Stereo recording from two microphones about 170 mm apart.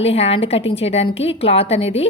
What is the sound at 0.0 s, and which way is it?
A woman's voice, 35° left (ahead or behind).